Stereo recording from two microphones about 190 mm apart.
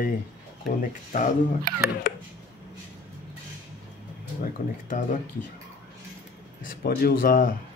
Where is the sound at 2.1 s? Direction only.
50° left (ahead or behind).